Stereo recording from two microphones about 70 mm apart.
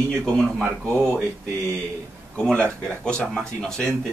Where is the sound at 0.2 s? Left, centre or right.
Centre.